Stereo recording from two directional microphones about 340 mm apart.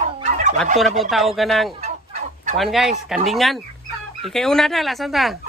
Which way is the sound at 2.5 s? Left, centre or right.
Centre.